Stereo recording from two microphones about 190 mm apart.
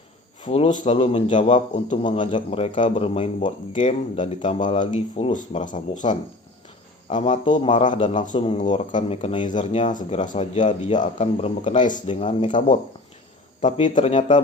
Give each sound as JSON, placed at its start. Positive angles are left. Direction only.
{"t": 0.4, "sound": "speech", "side_deg": 35}
{"t": 1.7, "sound": "speech", "side_deg": 40}